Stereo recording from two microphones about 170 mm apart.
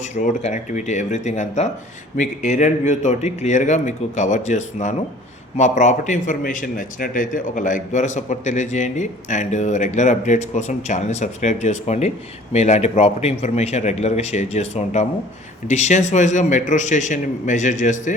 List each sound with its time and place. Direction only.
0.1 s a man's voice: 45° left (ahead or behind)